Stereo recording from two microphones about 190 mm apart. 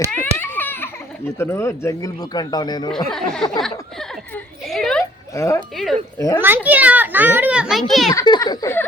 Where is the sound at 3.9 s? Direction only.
Centre (ahead or behind).